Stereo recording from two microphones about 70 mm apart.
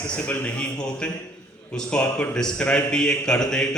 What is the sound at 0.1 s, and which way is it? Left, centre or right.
A man's voice, centre.